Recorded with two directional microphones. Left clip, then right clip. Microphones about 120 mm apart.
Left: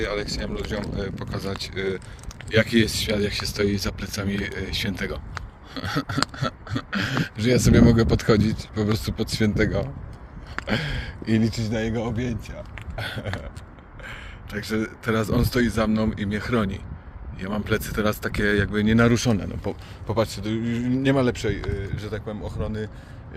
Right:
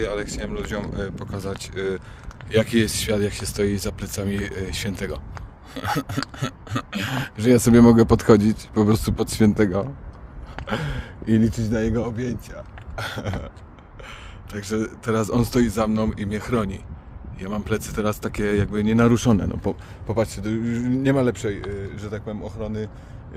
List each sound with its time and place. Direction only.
0.0 s speech: 60° right (ahead or behind)
0.9 s speech: 40° right (ahead or behind); by 5.1 s 90° right
6.4 s speech: 65° right (ahead or behind)
10.7 s speech: 60° right (ahead or behind)
11.5 s speech: 90° right
14.0 s speech: 45° right (ahead or behind)
19.1 s speech: 50° right (ahead or behind)
20.1 s speech: 30° right (ahead or behind)